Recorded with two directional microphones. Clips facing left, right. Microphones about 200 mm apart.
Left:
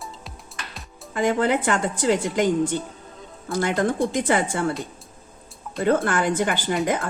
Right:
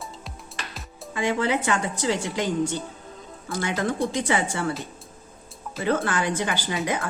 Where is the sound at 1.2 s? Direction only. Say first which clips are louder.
Left 3 dB; 50° left (ahead or behind).